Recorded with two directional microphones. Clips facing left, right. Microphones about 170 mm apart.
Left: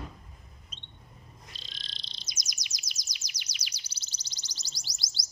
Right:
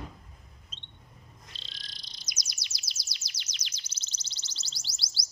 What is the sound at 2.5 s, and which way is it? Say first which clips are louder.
Chirp: left 1 dB; 15° left (ahead or behind).